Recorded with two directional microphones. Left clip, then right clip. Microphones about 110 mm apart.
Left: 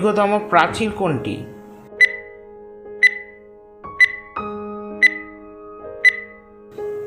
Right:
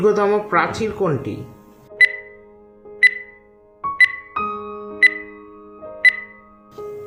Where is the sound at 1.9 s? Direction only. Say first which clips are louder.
Even; 50° right (ahead or behind).